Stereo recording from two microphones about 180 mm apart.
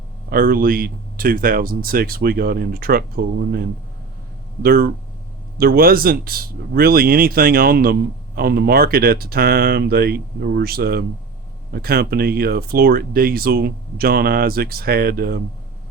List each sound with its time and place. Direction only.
0.3 s speech: 55° right (ahead or behind)
4.6 s speech: 55° right (ahead or behind)